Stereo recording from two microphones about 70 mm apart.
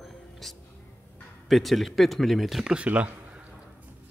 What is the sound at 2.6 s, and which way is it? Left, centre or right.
Speech, centre.